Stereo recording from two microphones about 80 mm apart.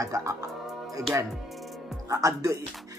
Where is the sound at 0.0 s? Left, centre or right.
Right.